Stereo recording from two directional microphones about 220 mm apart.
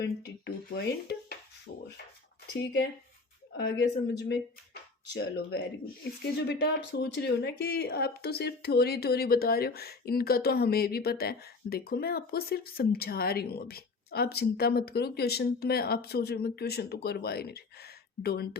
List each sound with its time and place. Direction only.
0.0 s speech: 45° left (ahead or behind)
2.5 s speech: 50° left (ahead or behind)